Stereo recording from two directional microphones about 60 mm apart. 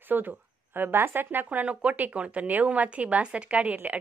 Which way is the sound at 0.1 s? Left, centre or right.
Right.